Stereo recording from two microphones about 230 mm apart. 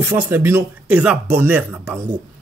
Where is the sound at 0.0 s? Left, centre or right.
Centre.